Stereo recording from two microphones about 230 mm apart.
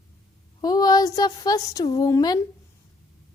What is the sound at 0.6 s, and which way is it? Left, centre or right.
A woman's voice, centre.